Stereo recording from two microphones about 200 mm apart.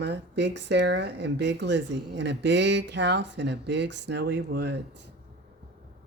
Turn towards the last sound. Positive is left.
turn(degrees=-60)  # may be behind; listen again after turning